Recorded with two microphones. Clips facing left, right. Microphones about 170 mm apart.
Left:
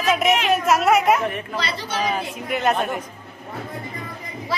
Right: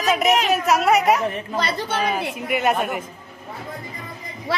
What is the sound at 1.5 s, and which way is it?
Speech, 50° right (ahead or behind).